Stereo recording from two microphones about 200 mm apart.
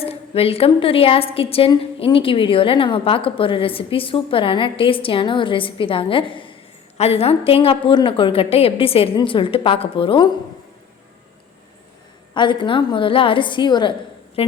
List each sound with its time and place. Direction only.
0.0 s a woman's voice: 30° left (ahead or behind)
12.3 s a woman's voice: 25° left (ahead or behind)